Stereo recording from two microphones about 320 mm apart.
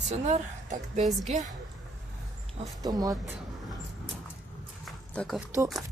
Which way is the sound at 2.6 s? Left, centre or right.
Centre.